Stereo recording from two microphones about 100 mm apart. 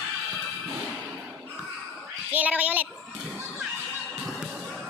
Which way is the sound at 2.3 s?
15° right (ahead or behind).